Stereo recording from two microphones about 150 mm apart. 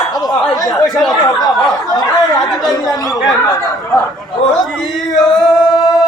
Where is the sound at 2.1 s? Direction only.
Centre (ahead or behind).